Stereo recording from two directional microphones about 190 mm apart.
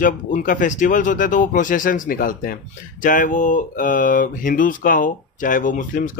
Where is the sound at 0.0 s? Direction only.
45° left (ahead or behind).